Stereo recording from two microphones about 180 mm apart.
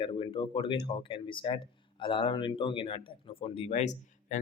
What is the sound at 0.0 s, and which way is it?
Speech, 30° left (ahead or behind).